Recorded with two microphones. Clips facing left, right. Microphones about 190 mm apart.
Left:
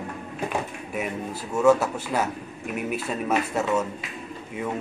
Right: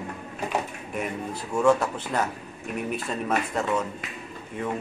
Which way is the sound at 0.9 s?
5° left (ahead or behind).